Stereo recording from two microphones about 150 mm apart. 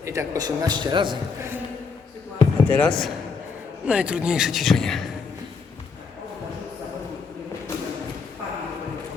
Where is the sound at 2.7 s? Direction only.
5° left (ahead or behind).